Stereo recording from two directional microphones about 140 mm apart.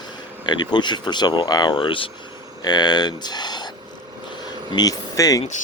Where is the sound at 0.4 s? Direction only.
30° left (ahead or behind).